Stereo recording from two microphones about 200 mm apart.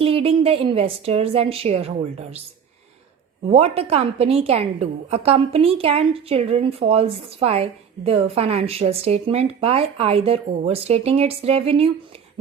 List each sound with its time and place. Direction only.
0.0 s a woman's voice: 30° right (ahead or behind)
3.5 s a woman's voice: 30° right (ahead or behind)